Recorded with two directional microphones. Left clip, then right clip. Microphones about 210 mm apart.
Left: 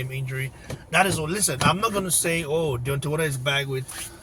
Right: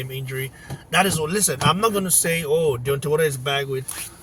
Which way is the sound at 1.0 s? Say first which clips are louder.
Right 2 dB; 25° right (ahead or behind).